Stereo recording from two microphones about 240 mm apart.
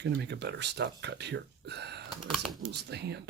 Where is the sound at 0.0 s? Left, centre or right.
Right.